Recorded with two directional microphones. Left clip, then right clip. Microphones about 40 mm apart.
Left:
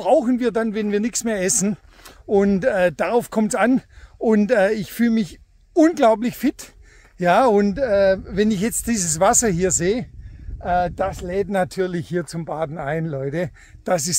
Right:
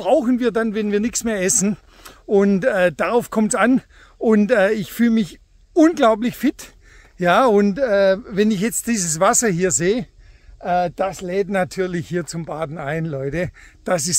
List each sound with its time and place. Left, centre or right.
0.0 s speech: left; by 5.2 s centre
5.2 s speech: left
7.6 s speech: centre
8.5 s speech: left
10.6 s speech: left
12.4 s speech: left
13.8 s speech: left